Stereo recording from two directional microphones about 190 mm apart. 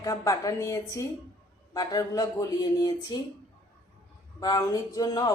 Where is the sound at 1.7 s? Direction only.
20° left (ahead or behind).